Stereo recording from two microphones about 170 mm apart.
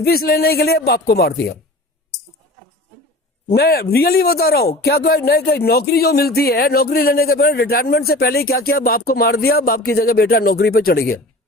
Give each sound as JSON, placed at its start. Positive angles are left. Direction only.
{"t": 0.0, "sound": "speech", "side_deg": 65}
{"t": 3.5, "sound": "speech", "side_deg": 65}